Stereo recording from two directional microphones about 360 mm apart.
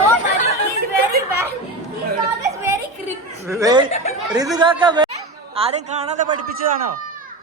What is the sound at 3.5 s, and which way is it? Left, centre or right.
A woman's voice, centre.